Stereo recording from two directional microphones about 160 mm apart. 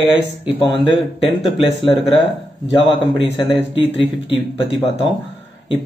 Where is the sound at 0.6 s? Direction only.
30° left (ahead or behind).